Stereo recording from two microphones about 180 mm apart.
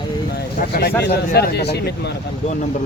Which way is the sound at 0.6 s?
55° left (ahead or behind).